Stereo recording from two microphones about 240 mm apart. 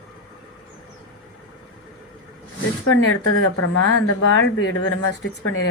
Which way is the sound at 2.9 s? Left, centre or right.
Left.